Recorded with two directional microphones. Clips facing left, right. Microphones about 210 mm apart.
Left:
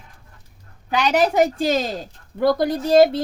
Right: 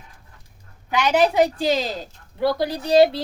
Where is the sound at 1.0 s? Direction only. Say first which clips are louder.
Even; 45° left (ahead or behind).